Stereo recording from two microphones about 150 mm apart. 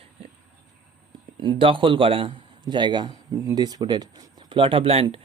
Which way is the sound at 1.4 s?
35° right (ahead or behind).